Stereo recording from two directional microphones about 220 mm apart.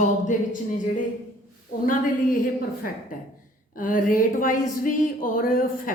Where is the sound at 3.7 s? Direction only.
40° left (ahead or behind).